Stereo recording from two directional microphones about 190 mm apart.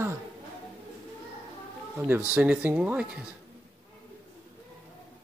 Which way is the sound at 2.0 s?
10° right (ahead or behind).